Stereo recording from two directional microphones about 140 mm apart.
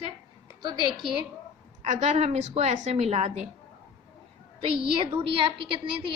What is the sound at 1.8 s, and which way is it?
A woman's voice, 55° right (ahead or behind).